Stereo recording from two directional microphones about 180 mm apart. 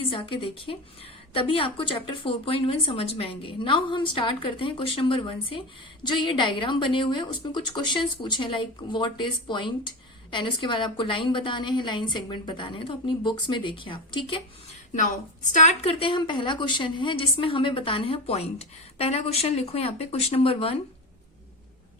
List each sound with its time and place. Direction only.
0.1 s a woman's voice: 30° left (ahead or behind)
15.5 s a woman's voice: 40° left (ahead or behind)